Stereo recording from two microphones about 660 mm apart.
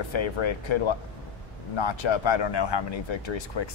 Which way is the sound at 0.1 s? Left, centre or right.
Left.